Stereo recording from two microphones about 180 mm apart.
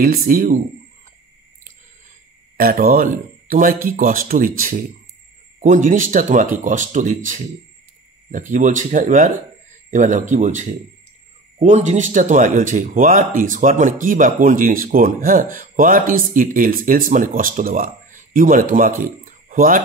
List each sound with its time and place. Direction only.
0.0 s speech: 50° right (ahead or behind)
2.5 s speech: 55° right (ahead or behind)